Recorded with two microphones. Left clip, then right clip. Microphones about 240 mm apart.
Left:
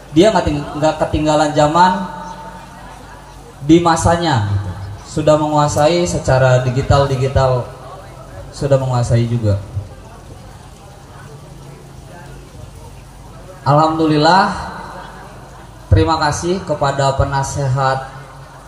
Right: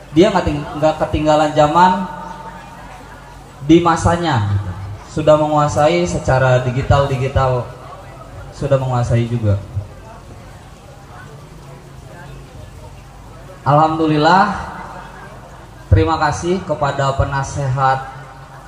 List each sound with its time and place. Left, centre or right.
0.1 s speech: left
3.6 s speech: left
8.5 s speech: left
13.7 s speech: left
15.9 s speech: left